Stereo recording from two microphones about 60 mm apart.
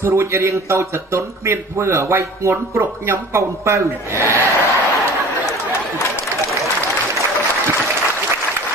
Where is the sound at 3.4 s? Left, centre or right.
Right.